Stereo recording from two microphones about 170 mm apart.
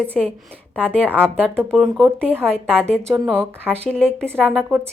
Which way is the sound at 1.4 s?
15° right (ahead or behind).